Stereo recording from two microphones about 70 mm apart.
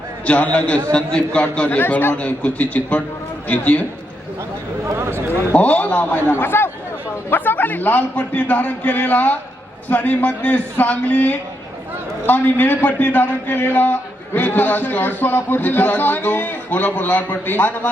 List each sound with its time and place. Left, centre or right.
0.3 s a man's voice: centre
4.9 s a sound: right
5.5 s a man's voice: left